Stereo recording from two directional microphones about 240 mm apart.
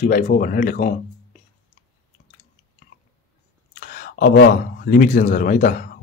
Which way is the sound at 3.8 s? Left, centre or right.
Left.